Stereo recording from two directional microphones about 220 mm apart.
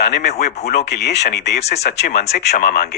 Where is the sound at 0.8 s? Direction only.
50° left (ahead or behind).